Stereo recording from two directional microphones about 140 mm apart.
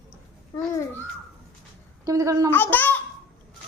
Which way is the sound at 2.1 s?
25° right (ahead or behind).